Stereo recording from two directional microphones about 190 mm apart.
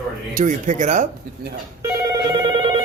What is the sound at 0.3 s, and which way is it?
Speech, 45° right (ahead or behind).